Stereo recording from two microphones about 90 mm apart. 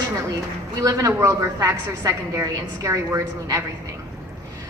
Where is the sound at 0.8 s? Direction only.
35° right (ahead or behind).